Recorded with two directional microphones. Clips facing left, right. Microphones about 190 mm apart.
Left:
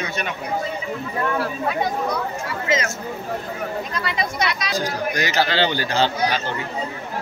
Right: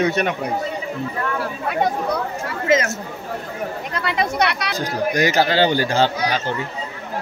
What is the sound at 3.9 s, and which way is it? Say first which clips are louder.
Speech: right 3 dB; 60° right (ahead or behind).